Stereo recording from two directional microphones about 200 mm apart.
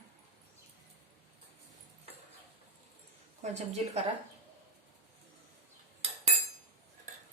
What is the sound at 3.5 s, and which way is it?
Speech, 35° right (ahead or behind).